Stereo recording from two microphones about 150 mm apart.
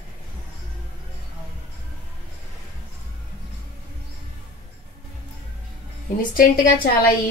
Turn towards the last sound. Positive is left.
turn(degrees=75)  # may be behind; listen again after turning